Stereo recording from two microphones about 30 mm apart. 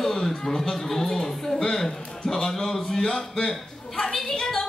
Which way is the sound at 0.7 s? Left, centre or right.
Centre.